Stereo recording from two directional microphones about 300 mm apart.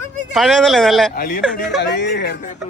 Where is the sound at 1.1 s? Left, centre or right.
Left.